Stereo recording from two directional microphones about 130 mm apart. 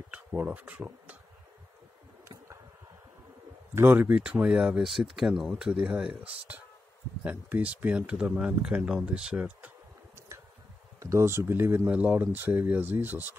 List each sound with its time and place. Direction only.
0.1 s speech: 10° right (ahead or behind)
3.7 s speech: 15° right (ahead or behind)
10.1 s a sound: 20° right (ahead or behind)
11.0 s speech: 25° right (ahead or behind)